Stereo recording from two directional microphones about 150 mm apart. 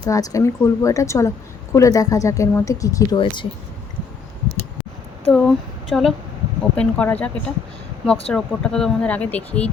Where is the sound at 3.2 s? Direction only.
30° left (ahead or behind).